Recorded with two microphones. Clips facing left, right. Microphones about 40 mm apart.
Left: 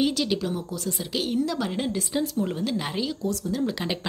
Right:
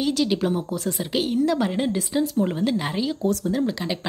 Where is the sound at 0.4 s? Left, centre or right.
Right.